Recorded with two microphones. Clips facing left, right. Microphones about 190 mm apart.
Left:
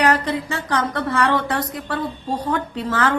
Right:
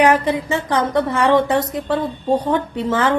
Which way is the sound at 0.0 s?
20° right (ahead or behind).